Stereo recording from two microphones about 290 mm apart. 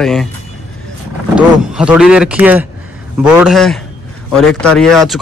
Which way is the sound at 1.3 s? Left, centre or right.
Centre.